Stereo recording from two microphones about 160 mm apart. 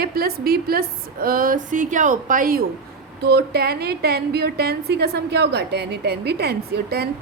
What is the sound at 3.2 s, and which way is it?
A woman's voice, 85° right.